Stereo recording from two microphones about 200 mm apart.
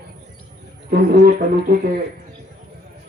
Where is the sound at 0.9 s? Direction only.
50° right (ahead or behind).